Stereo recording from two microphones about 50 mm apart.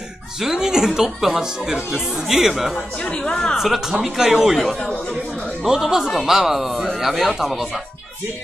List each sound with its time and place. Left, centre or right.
0.4 s a woman's voice: centre
3.1 s a woman's voice: centre
3.5 s a man's voice: centre